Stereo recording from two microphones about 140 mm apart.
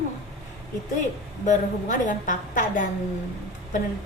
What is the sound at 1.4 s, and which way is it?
A woman's voice, 65° left (ahead or behind).